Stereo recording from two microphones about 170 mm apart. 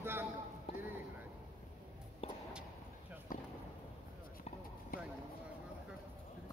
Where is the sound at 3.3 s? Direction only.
55° left (ahead or behind).